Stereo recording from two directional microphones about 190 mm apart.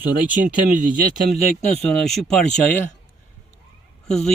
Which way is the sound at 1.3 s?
35° left (ahead or behind).